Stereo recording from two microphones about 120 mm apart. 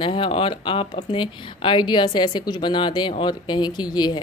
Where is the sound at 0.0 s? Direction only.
45° left (ahead or behind).